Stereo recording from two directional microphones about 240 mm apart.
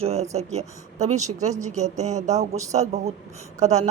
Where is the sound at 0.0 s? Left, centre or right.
Right.